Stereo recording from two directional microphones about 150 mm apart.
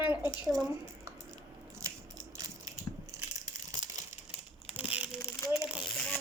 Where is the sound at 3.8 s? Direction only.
30° right (ahead or behind).